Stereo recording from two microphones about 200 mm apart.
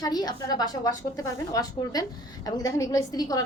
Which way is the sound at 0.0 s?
20° left (ahead or behind).